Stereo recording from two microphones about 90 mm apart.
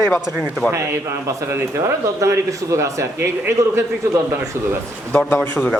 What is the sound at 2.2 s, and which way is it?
A man's voice, 35° right (ahead or behind).